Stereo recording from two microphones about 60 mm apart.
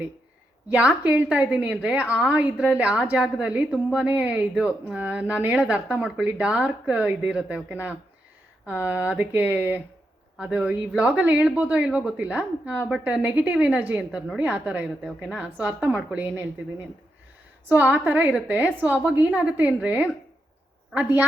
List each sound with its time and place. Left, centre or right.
0.7 s speech: right